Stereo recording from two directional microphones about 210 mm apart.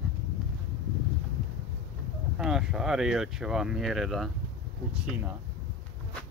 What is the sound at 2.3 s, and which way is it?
Speech, centre (ahead or behind).